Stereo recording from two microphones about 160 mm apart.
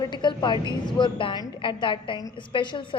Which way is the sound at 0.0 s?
30° left (ahead or behind).